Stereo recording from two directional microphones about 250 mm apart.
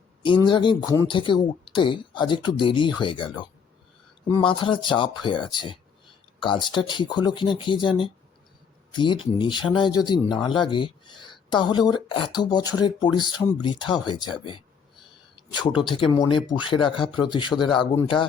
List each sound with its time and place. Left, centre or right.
0.3 s speech: centre
15.6 s speech: centre